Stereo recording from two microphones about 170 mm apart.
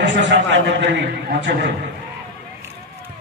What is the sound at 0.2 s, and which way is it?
A man's voice, 90° right.